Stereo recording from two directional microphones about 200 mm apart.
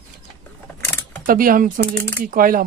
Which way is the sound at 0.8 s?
10° left (ahead or behind).